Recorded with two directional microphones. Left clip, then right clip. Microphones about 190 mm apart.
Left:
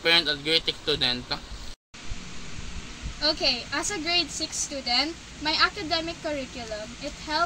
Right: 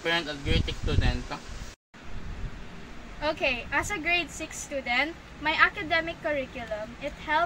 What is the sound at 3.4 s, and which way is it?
A woman's voice, centre (ahead or behind).